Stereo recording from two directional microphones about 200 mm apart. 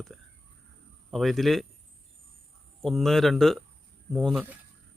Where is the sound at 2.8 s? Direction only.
Centre (ahead or behind).